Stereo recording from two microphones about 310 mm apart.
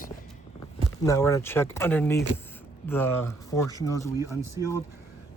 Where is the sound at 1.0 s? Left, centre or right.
Centre.